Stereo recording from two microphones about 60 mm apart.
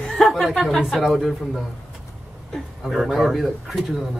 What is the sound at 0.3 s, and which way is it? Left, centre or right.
Speech, centre.